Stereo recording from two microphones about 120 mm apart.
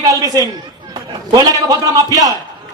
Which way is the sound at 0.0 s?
30° right (ahead or behind).